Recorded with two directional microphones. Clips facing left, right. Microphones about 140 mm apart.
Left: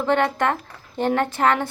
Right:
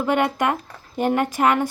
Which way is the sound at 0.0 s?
10° right (ahead or behind).